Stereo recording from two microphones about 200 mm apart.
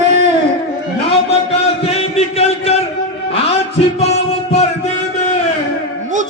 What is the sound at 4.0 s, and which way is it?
Music, 30° left (ahead or behind).